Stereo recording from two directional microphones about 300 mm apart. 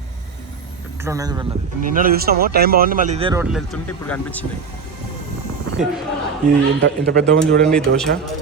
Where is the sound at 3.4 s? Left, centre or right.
Centre.